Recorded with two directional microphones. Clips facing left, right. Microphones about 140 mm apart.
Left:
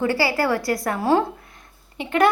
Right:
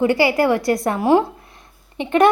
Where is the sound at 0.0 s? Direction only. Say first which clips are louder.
Right 5 dB; 20° right (ahead or behind).